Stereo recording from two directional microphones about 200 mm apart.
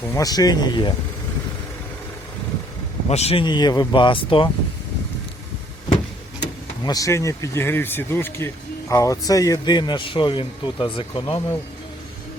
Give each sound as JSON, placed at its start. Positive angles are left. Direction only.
{"t": 0.1, "sound": "speech", "side_deg": 20}
{"t": 3.1, "sound": "speech", "side_deg": 30}
{"t": 6.8, "sound": "speech", "side_deg": 15}
{"t": 11.3, "sound": "speech", "side_deg": 15}